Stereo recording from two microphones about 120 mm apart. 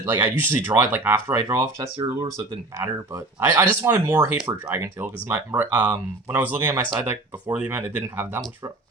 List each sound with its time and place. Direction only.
0.0 s speech: 20° right (ahead or behind)